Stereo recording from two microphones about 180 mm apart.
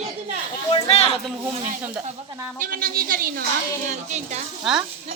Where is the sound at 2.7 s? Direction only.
55° right (ahead or behind).